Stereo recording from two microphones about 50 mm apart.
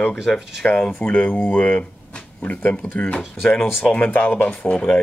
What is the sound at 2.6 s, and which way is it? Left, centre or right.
Speech, left.